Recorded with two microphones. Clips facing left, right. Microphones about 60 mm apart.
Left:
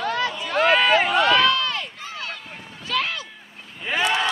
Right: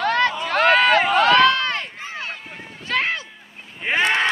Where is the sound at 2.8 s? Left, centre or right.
Right.